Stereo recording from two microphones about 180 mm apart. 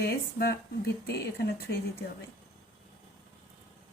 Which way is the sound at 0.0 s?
60° left (ahead or behind).